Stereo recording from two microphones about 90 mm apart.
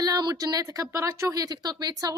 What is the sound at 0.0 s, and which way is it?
A woman's voice, 50° right (ahead or behind).